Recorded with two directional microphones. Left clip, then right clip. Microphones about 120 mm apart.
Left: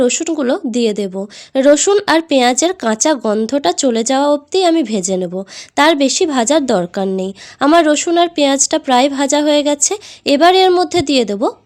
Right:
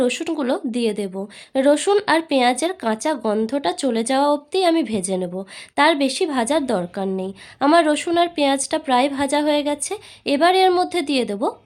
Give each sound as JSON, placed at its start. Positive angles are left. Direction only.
{"t": 0.0, "sound": "speech", "side_deg": 30}
{"t": 2.0, "sound": "a woman's voice", "side_deg": 45}
{"t": 3.2, "sound": "a woman's voice", "side_deg": 40}
{"t": 7.7, "sound": "speech", "side_deg": 35}